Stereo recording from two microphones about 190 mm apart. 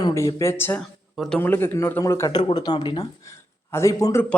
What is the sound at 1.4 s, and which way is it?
A man's voice, 10° left (ahead or behind).